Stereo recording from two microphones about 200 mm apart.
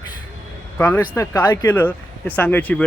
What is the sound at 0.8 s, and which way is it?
Speech, 10° left (ahead or behind).